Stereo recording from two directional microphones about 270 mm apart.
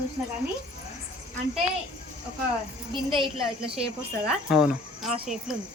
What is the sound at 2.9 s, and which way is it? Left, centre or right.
Speech, centre.